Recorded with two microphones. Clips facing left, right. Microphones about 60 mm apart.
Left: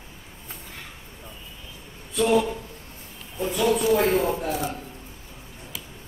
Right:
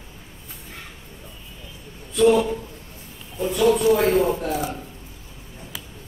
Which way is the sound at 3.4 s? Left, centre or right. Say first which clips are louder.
Right 4 dB; centre.